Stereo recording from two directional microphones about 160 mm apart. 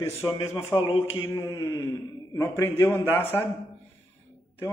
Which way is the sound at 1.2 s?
15° left (ahead or behind).